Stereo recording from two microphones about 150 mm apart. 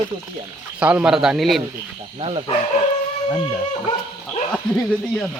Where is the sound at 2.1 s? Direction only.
35° right (ahead or behind).